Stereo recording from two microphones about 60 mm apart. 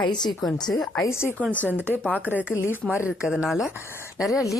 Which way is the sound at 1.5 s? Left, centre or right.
Left.